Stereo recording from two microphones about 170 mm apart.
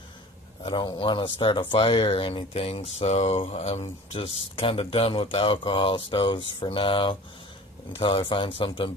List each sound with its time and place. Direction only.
0.6 s speech: 25° left (ahead or behind)